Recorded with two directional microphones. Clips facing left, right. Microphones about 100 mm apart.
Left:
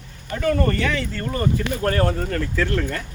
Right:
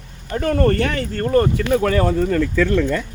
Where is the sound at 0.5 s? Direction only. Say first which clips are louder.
Right 5 dB; 55° right (ahead or behind).